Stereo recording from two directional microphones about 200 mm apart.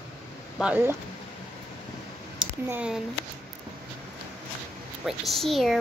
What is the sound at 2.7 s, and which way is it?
Speech, 5° right (ahead or behind).